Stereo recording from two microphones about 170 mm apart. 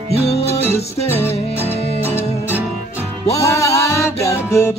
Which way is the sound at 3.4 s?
20° left (ahead or behind).